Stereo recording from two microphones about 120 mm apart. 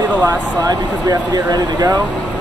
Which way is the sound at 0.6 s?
30° right (ahead or behind).